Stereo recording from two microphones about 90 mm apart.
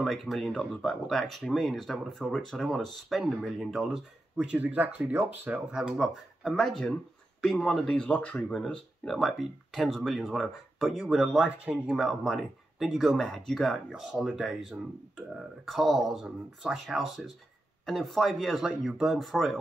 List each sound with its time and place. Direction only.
0.0 s speech: centre (ahead or behind); by 5.6 s 20° right (ahead or behind)
5.7 s speech: 10° right (ahead or behind)